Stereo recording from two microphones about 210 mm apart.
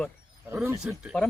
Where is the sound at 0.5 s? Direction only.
10° right (ahead or behind).